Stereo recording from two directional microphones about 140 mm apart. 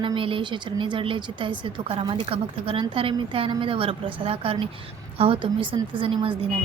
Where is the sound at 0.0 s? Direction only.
40° right (ahead or behind).